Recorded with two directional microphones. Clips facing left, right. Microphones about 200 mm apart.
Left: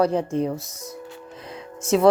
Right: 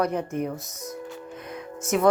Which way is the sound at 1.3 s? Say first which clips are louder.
Right 1 dB; 30° left (ahead or behind).